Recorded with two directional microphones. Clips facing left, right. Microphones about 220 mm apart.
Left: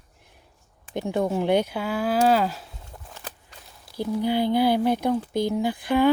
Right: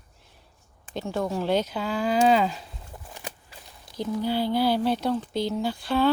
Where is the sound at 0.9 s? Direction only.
20° left (ahead or behind); by 3.0 s 5° left (ahead or behind).